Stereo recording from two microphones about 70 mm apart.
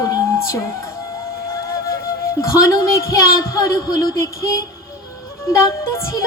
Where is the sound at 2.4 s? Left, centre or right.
Left.